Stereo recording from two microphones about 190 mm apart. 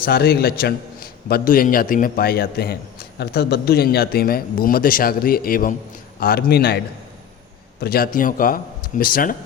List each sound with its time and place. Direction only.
0.0 s a man's voice: 55° left (ahead or behind)